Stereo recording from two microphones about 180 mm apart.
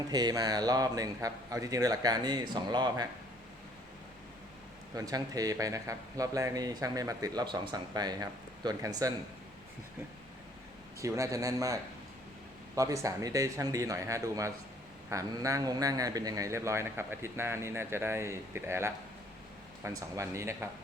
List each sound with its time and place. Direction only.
0.1 s speech: 20° right (ahead or behind)
4.9 s speech: 20° right (ahead or behind)
11.0 s a man's voice: 15° right (ahead or behind)